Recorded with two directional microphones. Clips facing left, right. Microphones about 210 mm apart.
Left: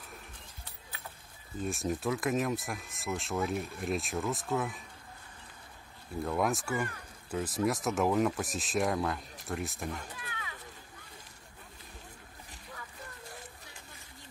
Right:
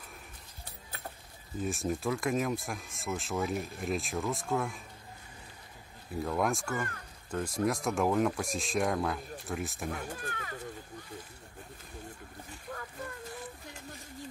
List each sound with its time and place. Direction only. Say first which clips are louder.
1.6 s speech: right 1 dB; centre (ahead or behind)
6.2 s speech: even; centre (ahead or behind)
9.8 s speech: right 3 dB; 50° right (ahead or behind)
12.7 s a sound: right 6 dB; 50° right (ahead or behind)